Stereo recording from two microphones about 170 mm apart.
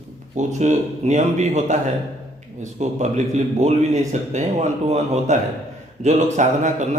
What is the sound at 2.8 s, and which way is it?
A man's voice, 45° right (ahead or behind).